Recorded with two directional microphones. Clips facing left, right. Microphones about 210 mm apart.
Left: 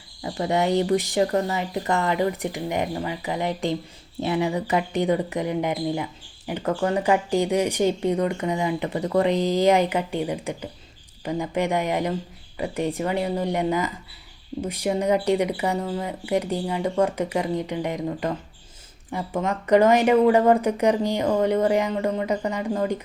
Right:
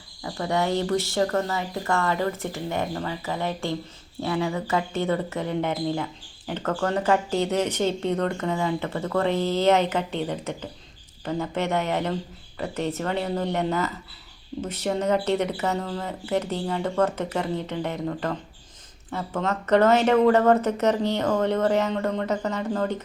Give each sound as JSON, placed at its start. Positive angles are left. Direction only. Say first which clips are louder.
{"t": 0.2, "sound": "speech", "louder": "left 2 dB", "side_deg": 20}